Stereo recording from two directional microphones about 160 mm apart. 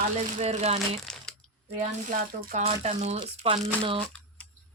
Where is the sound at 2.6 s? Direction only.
45° right (ahead or behind).